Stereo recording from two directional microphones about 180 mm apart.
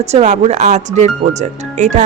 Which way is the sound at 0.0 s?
35° right (ahead or behind).